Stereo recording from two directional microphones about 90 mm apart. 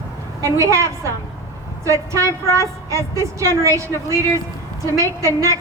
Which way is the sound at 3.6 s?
35° right (ahead or behind).